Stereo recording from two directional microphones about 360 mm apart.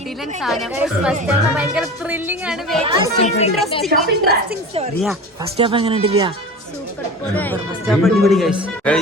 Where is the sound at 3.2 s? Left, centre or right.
Centre.